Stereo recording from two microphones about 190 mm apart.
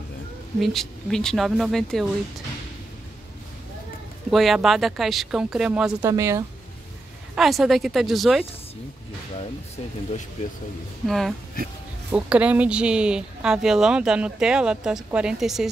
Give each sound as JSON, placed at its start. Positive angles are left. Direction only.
{"t": 0.6, "sound": "speech", "side_deg": 0}
{"t": 4.3, "sound": "speech", "side_deg": 0}
{"t": 6.0, "sound": "speech", "side_deg": -15}
{"t": 7.3, "sound": "speech", "side_deg": 0}
{"t": 10.4, "sound": "speech", "side_deg": 35}
{"t": 11.1, "sound": "speech", "side_deg": 0}